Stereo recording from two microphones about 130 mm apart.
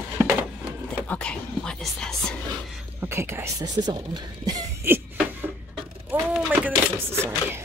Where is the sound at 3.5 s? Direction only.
30° right (ahead or behind).